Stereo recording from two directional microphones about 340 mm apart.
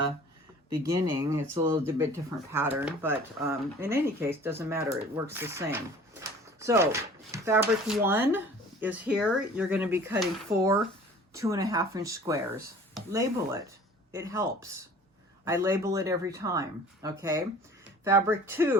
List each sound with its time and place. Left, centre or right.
0.7 s speech: centre
6.1 s a sound: centre
7.3 s speech: centre